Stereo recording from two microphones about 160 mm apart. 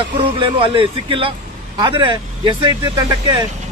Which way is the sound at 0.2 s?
35° right (ahead or behind).